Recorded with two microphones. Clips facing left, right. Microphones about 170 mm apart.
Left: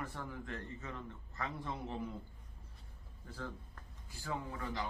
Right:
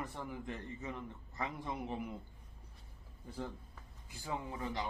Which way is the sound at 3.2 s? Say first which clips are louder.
Right 2 dB; 15° right (ahead or behind).